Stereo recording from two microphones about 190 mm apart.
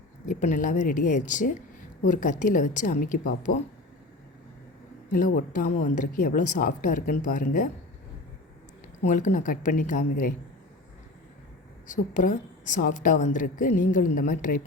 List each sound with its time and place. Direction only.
0.3 s a woman's voice: 40° left (ahead or behind)
5.0 s a woman's voice: 45° left (ahead or behind)
9.0 s a woman's voice: 45° left (ahead or behind)
11.9 s a woman's voice: 45° left (ahead or behind)